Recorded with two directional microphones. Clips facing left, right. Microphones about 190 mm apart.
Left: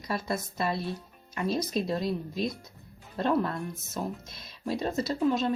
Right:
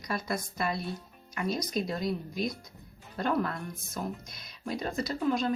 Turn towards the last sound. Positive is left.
turn(degrees=25)  # may be behind; listen again after turning